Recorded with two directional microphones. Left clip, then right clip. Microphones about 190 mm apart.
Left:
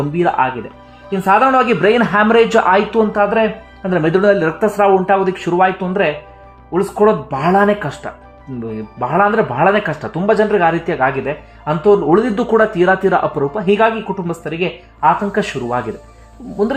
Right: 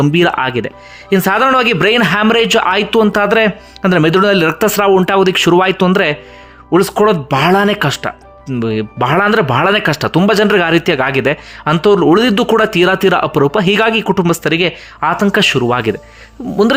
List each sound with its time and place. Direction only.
0.1 s speech: 35° right (ahead or behind)